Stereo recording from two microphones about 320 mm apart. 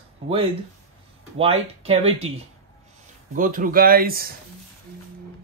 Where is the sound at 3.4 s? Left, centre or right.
Right.